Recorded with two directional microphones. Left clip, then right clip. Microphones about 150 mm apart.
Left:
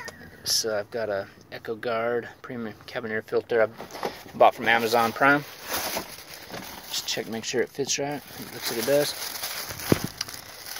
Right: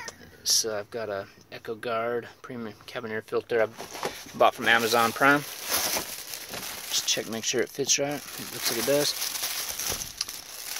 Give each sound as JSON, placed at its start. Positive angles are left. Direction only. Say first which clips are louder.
{"t": 0.5, "sound": "speech", "louder": "left 1 dB", "side_deg": -20}
{"t": 5.7, "sound": "a sound", "louder": "right 2 dB", "side_deg": -70}
{"t": 6.9, "sound": "speech", "louder": "right 2 dB", "side_deg": -45}